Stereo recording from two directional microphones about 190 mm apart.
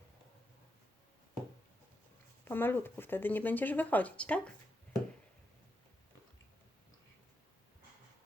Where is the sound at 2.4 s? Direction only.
10° left (ahead or behind).